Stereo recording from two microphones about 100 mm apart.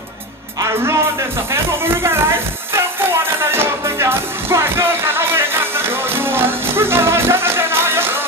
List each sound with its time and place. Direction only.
0.6 s music: 30° right (ahead or behind)
2.0 s a sound: 25° right (ahead or behind)
3.5 s music: 25° right (ahead or behind)